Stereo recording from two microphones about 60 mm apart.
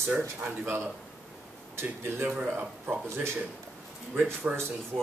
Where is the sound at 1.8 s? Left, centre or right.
Right.